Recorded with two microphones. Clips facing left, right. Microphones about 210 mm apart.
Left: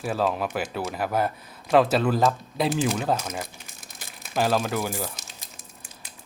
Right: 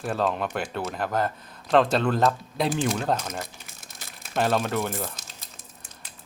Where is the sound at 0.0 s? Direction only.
5° left (ahead or behind).